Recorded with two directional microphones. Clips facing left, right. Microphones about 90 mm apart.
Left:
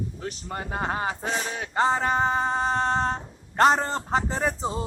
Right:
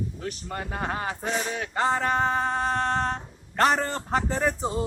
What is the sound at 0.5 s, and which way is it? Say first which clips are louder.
A man's voice: left 2 dB; 25° left (ahead or behind).